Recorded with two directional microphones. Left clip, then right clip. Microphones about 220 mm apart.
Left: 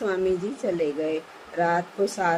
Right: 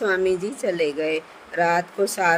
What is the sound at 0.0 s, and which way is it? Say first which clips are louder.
Speech: right 4 dB; 30° right (ahead or behind).